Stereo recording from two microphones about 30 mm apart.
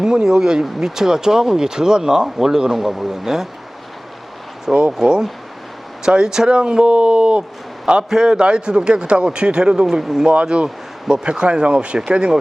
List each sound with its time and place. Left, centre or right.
0.0 s speech: right
4.9 s speech: right
8.1 s speech: right
10.0 s speech: centre
10.5 s speech: right
11.9 s speech: right